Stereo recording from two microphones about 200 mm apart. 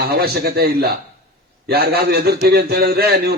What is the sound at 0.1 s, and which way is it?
A man's voice, 50° right (ahead or behind).